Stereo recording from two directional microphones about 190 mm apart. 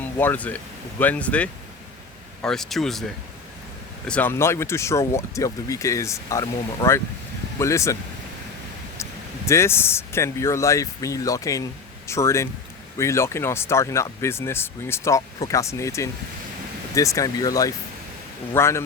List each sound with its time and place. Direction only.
0.0 s speech: 10° left (ahead or behind)
4.0 s speech: 5° left (ahead or behind)
9.5 s speech: 15° left (ahead or behind)